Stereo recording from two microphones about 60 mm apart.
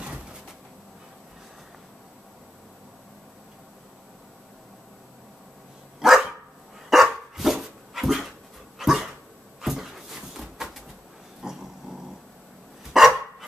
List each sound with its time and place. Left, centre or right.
0.0 s a sound: centre
5.9 s dog: centre
12.9 s dog: centre